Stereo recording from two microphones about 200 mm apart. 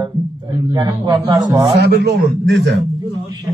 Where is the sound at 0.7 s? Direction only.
20° right (ahead or behind).